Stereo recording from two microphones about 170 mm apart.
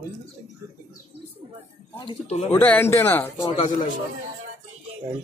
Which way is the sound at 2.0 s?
30° left (ahead or behind).